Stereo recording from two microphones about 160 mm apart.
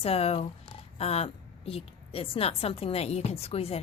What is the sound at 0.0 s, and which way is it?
A woman's voice, 40° left (ahead or behind).